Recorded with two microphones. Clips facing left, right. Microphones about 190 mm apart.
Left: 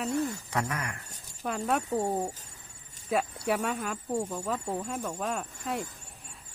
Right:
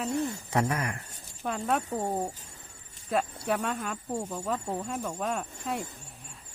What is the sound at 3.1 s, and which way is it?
Speech, 5° left (ahead or behind).